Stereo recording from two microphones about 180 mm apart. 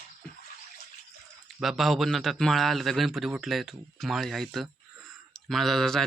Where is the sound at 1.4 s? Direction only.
Centre (ahead or behind).